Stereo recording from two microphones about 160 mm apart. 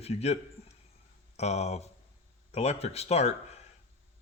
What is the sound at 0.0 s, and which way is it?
Speech, 40° left (ahead or behind).